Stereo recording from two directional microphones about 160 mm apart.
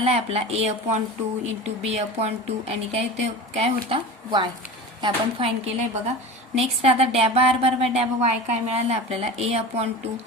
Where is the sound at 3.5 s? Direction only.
35° right (ahead or behind).